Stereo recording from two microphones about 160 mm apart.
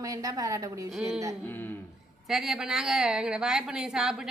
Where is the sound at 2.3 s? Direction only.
Centre (ahead or behind).